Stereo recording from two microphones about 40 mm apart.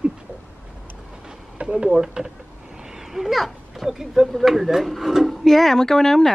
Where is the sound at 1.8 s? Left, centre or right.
Centre.